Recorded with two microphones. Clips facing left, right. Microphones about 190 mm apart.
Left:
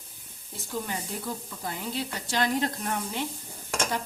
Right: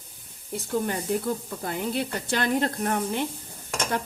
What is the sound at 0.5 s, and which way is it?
Speech, 60° right (ahead or behind).